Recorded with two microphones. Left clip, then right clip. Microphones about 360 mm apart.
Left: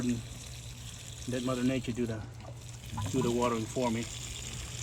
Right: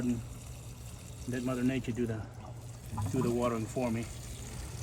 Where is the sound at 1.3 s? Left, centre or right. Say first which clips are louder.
Left 2 dB; centre.